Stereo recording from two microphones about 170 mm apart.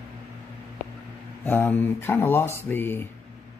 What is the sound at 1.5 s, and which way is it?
Speech, 10° left (ahead or behind).